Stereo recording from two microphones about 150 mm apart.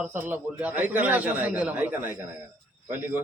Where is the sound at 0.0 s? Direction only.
15° right (ahead or behind).